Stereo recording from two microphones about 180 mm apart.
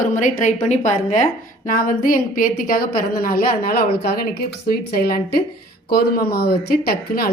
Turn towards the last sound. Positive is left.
turn(degrees=55)  # may be behind; listen again after turning